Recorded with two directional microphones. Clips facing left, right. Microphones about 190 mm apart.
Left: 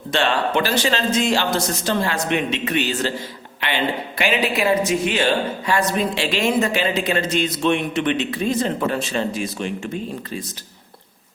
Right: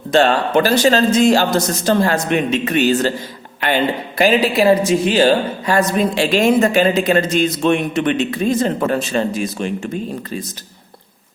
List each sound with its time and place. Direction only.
0.1 s speech: 45° right (ahead or behind)